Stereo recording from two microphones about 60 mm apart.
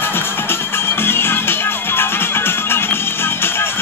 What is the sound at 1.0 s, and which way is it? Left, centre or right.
Music, left.